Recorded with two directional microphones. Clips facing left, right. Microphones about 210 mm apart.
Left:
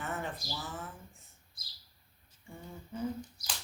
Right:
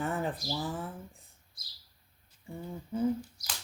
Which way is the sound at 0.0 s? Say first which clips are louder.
Right 6 dB; 35° right (ahead or behind).